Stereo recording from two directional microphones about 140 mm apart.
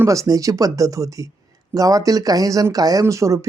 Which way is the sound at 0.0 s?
20° right (ahead or behind).